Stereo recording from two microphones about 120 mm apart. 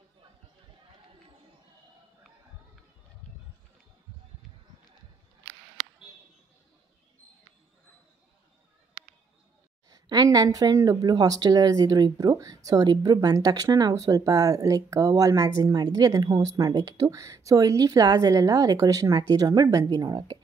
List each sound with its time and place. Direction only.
9.8 s speech: 30° right (ahead or behind)